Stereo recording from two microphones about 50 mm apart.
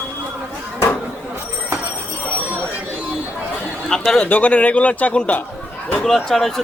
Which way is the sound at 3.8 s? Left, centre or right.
Centre.